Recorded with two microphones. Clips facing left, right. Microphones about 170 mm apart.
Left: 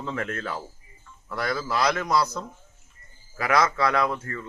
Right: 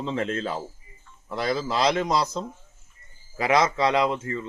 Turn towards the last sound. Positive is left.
turn(degrees=-20)  # may be behind; listen again after turning